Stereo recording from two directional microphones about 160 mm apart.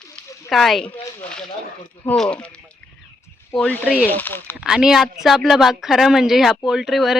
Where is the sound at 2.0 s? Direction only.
5° left (ahead or behind).